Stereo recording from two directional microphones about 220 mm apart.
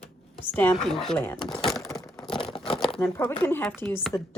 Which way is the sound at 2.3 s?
20° left (ahead or behind).